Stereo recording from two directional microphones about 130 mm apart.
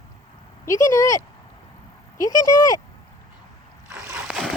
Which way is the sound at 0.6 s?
25° left (ahead or behind).